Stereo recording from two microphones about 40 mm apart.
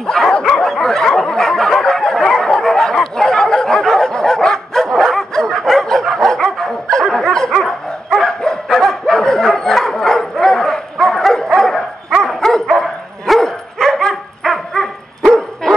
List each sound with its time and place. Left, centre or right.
0.0 s bow-wow: centre
0.7 s a sound: centre
5.7 s dog: centre
8.4 s bow-wow: centre
8.8 s dog: centre
10.4 s bow-wow: centre
11.5 s dog: centre
15.6 s bow-wow: centre